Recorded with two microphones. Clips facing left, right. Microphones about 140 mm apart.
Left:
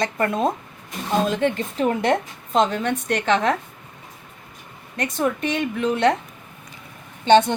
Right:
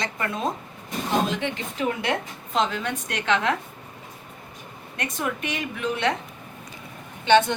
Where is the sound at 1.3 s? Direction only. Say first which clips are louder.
Left 6 dB; 50° left (ahead or behind).